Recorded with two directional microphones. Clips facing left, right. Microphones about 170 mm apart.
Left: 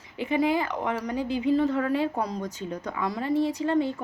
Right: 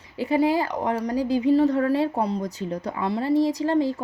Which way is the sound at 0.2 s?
35° right (ahead or behind).